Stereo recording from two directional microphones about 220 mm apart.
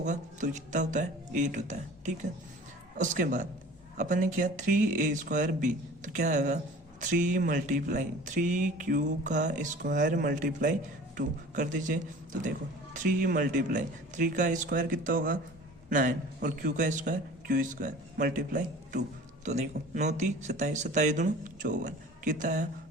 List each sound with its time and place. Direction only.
0.0 s speech: 35° right (ahead or behind)